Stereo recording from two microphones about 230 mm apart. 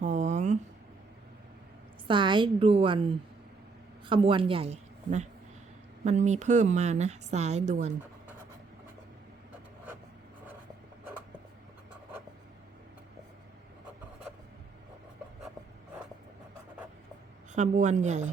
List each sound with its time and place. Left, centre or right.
0.0 s a sound: right
2.0 s a woman's voice: centre
17.5 s a woman's voice: right